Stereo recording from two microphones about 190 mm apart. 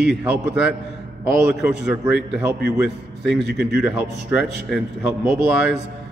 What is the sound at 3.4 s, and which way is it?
Speech, 60° right (ahead or behind).